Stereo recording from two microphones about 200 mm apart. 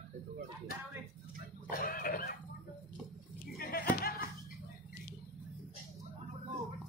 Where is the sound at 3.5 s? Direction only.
50° left (ahead or behind).